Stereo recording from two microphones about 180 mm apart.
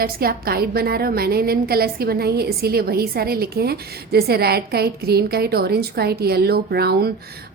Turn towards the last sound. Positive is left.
turn(degrees=-60)  # may be behind; listen again after turning